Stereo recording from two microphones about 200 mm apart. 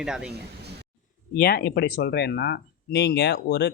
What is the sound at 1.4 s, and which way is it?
Speech, 45° left (ahead or behind).